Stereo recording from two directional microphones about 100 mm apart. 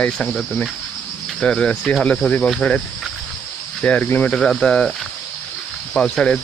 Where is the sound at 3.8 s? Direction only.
15° left (ahead or behind).